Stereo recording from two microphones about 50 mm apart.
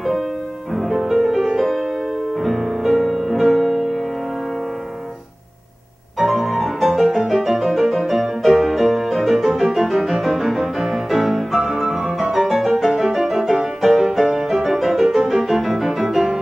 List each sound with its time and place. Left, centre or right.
0.7 s music: centre
6.1 s music: centre